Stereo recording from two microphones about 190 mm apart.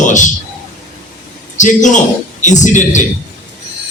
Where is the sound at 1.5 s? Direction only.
40° left (ahead or behind).